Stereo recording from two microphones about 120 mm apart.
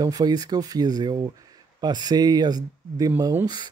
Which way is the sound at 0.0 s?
35° right (ahead or behind).